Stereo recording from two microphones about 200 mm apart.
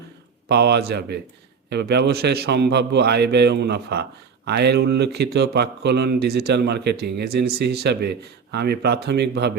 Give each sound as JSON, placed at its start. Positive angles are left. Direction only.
{"t": 0.4, "sound": "speech", "side_deg": -55}